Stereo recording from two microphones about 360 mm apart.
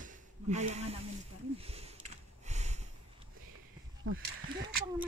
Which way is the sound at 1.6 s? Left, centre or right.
Centre.